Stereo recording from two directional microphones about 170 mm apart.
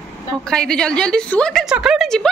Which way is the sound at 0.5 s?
5° left (ahead or behind).